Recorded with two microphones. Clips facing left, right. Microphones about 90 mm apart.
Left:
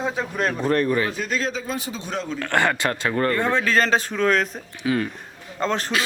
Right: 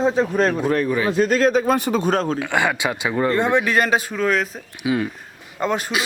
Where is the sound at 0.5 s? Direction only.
5° right (ahead or behind).